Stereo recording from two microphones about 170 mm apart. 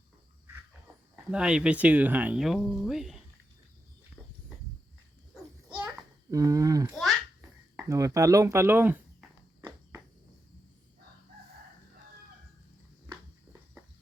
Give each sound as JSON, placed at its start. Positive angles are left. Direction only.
{"t": 1.3, "sound": "speech", "side_deg": -5}
{"t": 5.3, "sound": "children playing", "side_deg": -5}
{"t": 6.3, "sound": "speech", "side_deg": -20}
{"t": 6.9, "sound": "babbling", "side_deg": 0}
{"t": 7.9, "sound": "speech", "side_deg": -20}
{"t": 9.6, "sound": "walk", "side_deg": -15}